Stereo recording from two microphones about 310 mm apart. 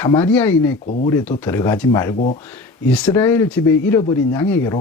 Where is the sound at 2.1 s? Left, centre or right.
Left.